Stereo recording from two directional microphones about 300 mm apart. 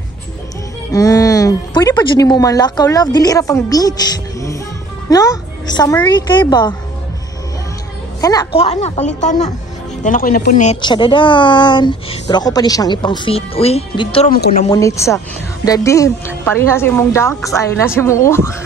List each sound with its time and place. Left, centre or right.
0.9 s speech: centre
5.1 s speech: centre
8.2 s a woman's voice: centre